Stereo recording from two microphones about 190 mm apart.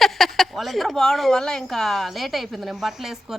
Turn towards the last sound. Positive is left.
turn(degrees=0)  # may be behind; listen again after turning